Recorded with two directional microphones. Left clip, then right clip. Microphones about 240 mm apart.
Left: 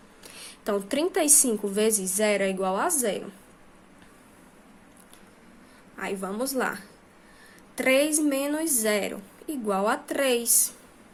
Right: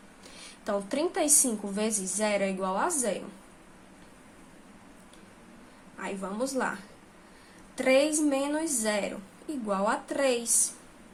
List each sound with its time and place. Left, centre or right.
0.3 s a woman's voice: left
6.0 s a woman's voice: left
7.8 s a woman's voice: left